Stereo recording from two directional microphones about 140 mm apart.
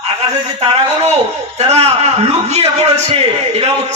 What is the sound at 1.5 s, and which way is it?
A man's voice, 50° right (ahead or behind).